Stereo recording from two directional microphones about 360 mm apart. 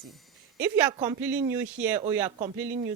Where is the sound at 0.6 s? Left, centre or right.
Centre.